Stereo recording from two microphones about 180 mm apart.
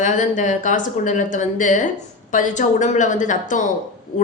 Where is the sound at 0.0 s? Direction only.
45° left (ahead or behind).